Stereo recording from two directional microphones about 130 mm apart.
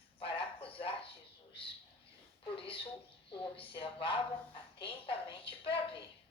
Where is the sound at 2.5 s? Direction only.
45° left (ahead or behind).